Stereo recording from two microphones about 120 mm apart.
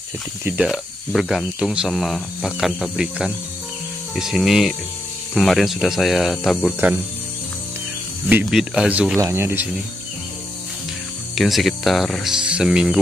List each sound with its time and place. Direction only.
0.5 s speech: 5° right (ahead or behind)
8.3 s speech: 15° right (ahead or behind)
9.2 s speech: 20° right (ahead or behind)
11.3 s speech: centre (ahead or behind)